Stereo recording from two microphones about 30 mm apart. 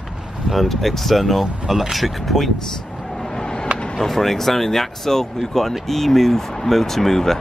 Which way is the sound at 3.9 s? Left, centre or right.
Centre.